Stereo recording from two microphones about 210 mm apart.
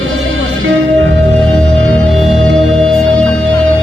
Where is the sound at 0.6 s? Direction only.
65° right (ahead or behind).